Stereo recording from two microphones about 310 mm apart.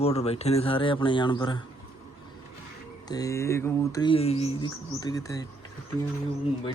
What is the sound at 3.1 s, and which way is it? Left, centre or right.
Mantra, centre.